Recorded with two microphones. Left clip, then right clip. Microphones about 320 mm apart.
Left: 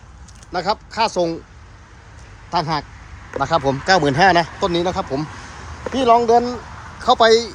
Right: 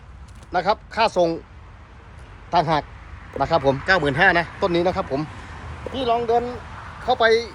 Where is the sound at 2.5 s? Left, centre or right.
Centre.